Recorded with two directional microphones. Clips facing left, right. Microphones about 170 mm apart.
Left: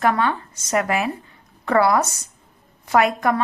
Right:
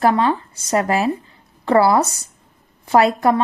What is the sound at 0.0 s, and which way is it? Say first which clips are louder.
Speech: right 4 dB; 30° right (ahead or behind).